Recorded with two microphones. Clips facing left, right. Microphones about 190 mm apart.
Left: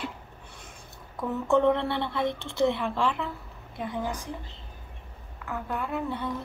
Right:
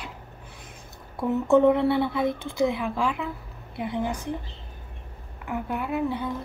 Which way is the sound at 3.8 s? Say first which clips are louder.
Right 3 dB; 15° right (ahead or behind).